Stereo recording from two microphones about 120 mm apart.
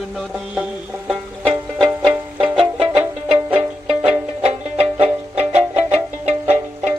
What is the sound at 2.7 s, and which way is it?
Music, 55° right (ahead or behind).